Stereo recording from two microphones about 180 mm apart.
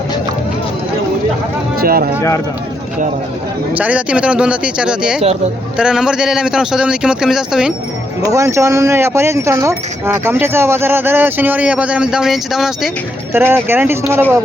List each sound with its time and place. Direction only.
1.8 s a sound: 55° right (ahead or behind)
3.8 s a man's voice: 10° right (ahead or behind)
8.2 s speech: 20° right (ahead or behind); by 12.9 s centre (ahead or behind)
13.3 s speech: 15° right (ahead or behind)